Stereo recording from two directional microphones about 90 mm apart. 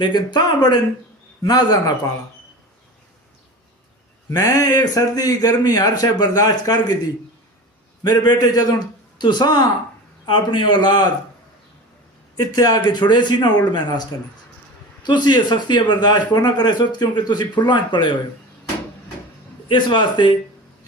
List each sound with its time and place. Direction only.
0.0 s a man's voice: 55° left (ahead or behind)
4.3 s a man's voice: 45° left (ahead or behind)
8.0 s a man's voice: 50° left (ahead or behind)
10.2 s a man's voice: 65° left (ahead or behind)
12.4 s a man's voice: 45° left (ahead or behind)
12.9 s a man's voice: 55° left (ahead or behind)
19.6 s a man's voice: 65° left (ahead or behind)